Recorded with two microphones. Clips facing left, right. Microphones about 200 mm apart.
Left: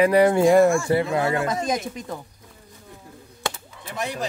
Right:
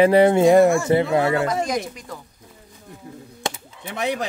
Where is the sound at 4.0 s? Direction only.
65° right (ahead or behind).